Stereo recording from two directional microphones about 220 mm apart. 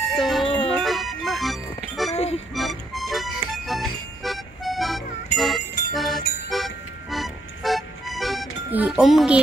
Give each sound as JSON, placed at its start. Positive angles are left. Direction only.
{"t": 0.1, "sound": "music", "side_deg": 0}
{"t": 2.1, "sound": "music", "side_deg": 30}
{"t": 2.5, "sound": "music", "side_deg": 0}